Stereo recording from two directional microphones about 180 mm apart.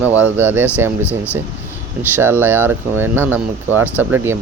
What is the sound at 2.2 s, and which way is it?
Speech, 15° right (ahead or behind).